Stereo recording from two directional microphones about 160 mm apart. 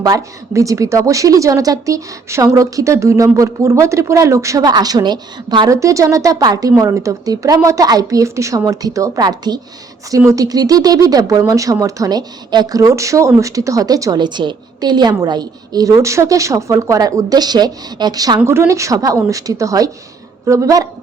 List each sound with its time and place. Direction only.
0.0 s a woman's voice: 20° right (ahead or behind)